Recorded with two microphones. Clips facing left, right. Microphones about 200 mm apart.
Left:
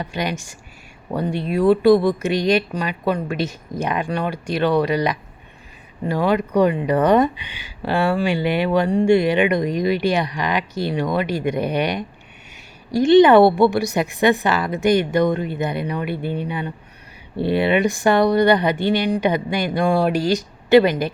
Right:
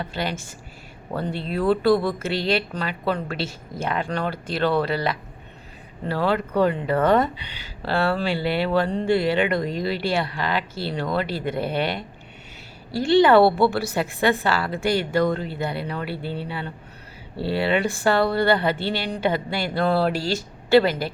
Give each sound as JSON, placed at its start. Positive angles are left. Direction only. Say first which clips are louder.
{"t": 0.0, "sound": "speech", "louder": "left 3 dB", "side_deg": 15}